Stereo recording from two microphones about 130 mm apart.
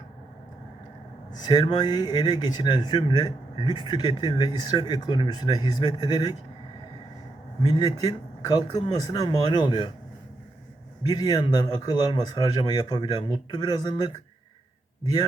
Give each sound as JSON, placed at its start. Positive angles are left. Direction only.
{"t": 1.3, "sound": "speech", "side_deg": 35}
{"t": 7.7, "sound": "speech", "side_deg": 30}
{"t": 11.1, "sound": "speech", "side_deg": 30}